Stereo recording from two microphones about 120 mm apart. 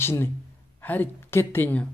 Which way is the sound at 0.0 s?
20° left (ahead or behind).